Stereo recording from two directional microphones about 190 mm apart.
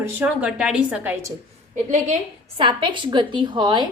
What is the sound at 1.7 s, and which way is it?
Speech, 35° right (ahead or behind).